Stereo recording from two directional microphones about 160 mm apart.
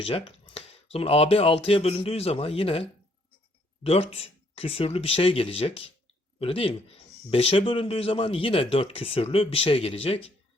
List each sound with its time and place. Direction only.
0.0 s speech: 35° left (ahead or behind)
3.8 s speech: 40° left (ahead or behind)